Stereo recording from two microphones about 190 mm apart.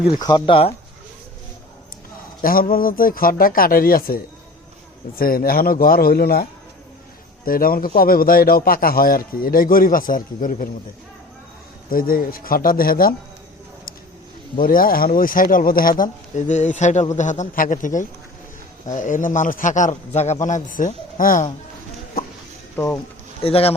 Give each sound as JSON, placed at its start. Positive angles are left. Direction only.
{"t": 0.2, "sound": "speech", "side_deg": 25}
{"t": 2.4, "sound": "a man's voice", "side_deg": 50}
{"t": 11.9, "sound": "a man's voice", "side_deg": 50}
{"t": 14.5, "sound": "a man's voice", "side_deg": 50}
{"t": 22.7, "sound": "speech", "side_deg": 15}
{"t": 23.4, "sound": "a man's voice", "side_deg": 30}